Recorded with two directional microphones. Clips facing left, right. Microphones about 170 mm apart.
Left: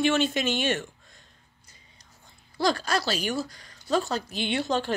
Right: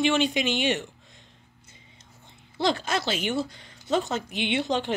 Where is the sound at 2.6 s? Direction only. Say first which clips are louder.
Even; 20° right (ahead or behind).